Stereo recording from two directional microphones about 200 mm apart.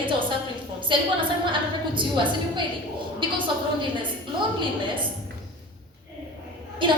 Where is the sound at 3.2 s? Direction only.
25° right (ahead or behind).